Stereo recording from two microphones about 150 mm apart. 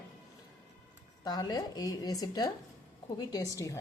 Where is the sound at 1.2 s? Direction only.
25° left (ahead or behind).